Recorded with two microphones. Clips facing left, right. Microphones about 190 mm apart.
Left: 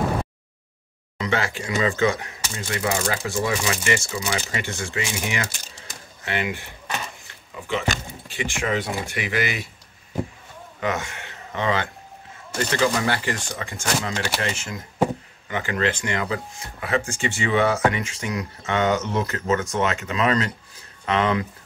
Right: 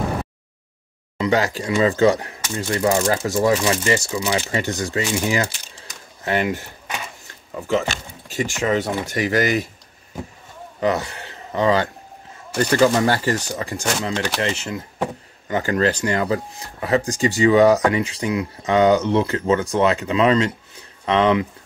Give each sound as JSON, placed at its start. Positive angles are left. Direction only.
{"t": 1.1, "sound": "speech", "side_deg": -35}
{"t": 8.3, "sound": "speech", "side_deg": -40}
{"t": 10.8, "sound": "a man's voice", "side_deg": -35}